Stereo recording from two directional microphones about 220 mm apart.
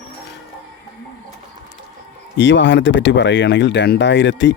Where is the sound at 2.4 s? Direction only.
55° left (ahead or behind).